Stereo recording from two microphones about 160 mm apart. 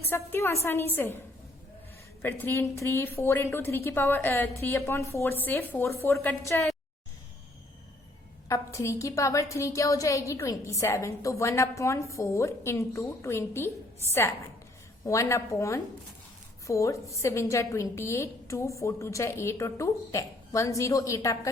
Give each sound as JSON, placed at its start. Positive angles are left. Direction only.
{"t": 0.1, "sound": "a woman's voice", "side_deg": 15}
{"t": 2.2, "sound": "a woman's voice", "side_deg": 15}
{"t": 8.4, "sound": "a woman's voice", "side_deg": 20}